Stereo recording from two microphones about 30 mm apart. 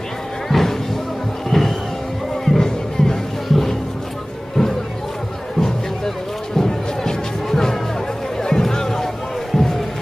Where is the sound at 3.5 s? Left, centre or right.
Centre.